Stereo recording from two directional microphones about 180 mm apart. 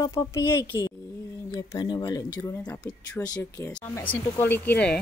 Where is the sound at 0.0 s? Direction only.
15° left (ahead or behind).